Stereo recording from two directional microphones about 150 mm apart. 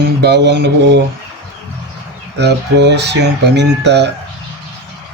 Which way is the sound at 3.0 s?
90° right.